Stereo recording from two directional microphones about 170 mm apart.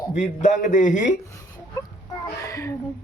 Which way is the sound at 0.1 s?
45° left (ahead or behind).